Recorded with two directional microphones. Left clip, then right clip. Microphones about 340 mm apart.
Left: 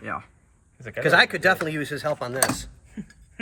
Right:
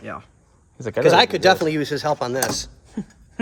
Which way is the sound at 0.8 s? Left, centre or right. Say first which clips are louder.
Right 4 dB; right.